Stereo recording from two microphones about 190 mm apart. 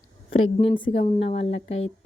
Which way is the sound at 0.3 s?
90° left.